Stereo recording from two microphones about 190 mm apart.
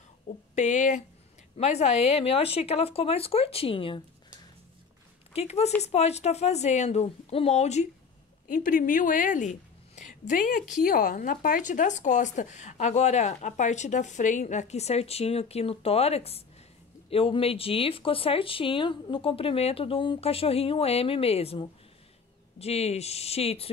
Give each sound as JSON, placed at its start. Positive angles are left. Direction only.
{"t": 0.6, "sound": "speech", "side_deg": 40}
{"t": 5.3, "sound": "a woman's voice", "side_deg": 35}